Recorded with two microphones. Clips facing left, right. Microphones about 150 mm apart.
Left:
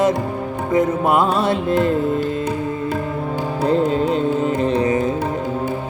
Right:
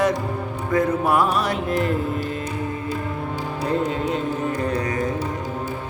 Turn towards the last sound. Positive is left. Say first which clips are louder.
# left 6 dB
turn(degrees=25)  # may be behind; listen again after turning